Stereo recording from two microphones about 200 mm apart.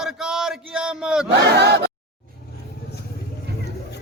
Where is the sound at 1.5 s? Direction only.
55° right (ahead or behind).